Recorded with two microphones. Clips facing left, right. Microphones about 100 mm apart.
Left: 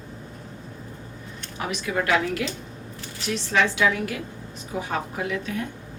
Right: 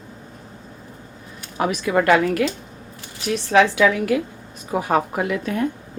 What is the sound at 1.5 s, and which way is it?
A woman's voice, 55° right (ahead or behind).